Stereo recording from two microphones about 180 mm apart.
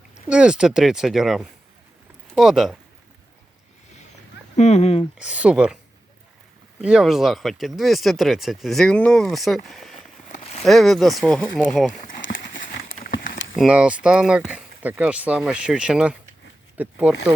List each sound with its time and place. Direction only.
0.3 s speech: 5° right (ahead or behind)
4.5 s speech: 40° left (ahead or behind)
5.1 s speech: 5° right (ahead or behind)
6.8 s speech: 5° right (ahead or behind)
11.9 s speech: 45° left (ahead or behind)
12.2 s horse: 90° left
12.5 s a sound: 50° left (ahead or behind)
13.1 s a sound: 85° left
13.6 s speech: 5° right (ahead or behind)